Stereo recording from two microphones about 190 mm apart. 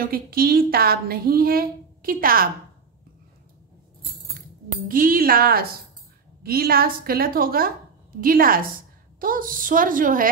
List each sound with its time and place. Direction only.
0.1 s a woman's voice: 50° right (ahead or behind)
4.8 s a woman's voice: 50° right (ahead or behind)